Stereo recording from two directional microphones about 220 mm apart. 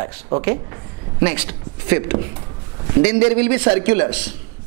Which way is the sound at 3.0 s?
10° right (ahead or behind).